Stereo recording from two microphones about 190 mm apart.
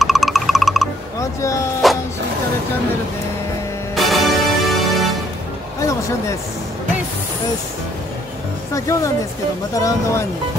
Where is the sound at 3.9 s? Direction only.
Centre (ahead or behind).